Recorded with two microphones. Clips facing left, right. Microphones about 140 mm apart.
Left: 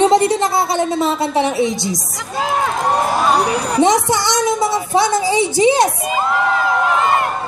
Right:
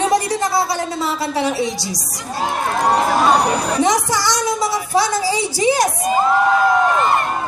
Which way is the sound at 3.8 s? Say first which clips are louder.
Left 7 dB; 25° left (ahead or behind).